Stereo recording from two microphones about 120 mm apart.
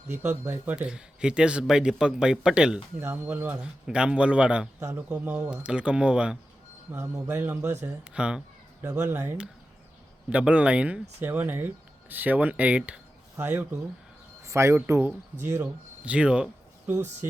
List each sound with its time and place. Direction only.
0.2 s speech: 20° right (ahead or behind); by 2.8 s 5° right (ahead or behind)
3.0 s speech: 20° right (ahead or behind)
4.8 s a man's voice: 20° right (ahead or behind)
5.0 s speech: 10° right (ahead or behind)
6.9 s a man's voice: 20° right (ahead or behind)
13.3 s a man's voice: 20° right (ahead or behind)
16.9 s a man's voice: 20° right (ahead or behind)